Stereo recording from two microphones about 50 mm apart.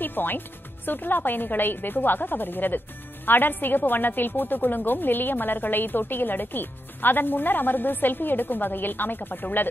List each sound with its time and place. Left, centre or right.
0.0 s music: left
0.8 s a woman's voice: left